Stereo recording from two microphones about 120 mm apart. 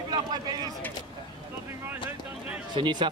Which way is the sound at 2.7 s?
40° right (ahead or behind).